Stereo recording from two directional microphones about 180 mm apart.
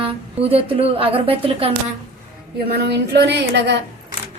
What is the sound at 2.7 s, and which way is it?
A woman's voice, 60° right (ahead or behind).